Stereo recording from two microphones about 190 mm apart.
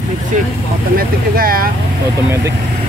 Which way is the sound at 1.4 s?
50° right (ahead or behind).